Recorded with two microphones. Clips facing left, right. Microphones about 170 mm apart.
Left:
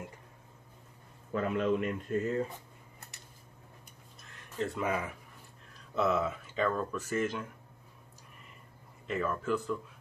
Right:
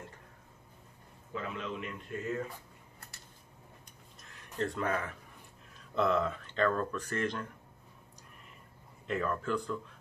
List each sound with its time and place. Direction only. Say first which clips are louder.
1.3 s a man's voice: left 9 dB; 50° left (ahead or behind)
4.2 s a sound: even; centre (ahead or behind)
5.8 s speech: even; 5° left (ahead or behind)
9.0 s speech: even; centre (ahead or behind)